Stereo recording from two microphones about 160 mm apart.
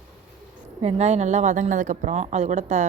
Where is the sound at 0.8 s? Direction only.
40° right (ahead or behind).